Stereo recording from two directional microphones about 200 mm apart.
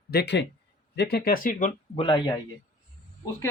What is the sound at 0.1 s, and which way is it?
A man's voice, 55° left (ahead or behind).